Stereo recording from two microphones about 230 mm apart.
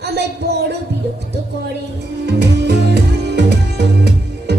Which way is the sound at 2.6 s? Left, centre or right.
Right.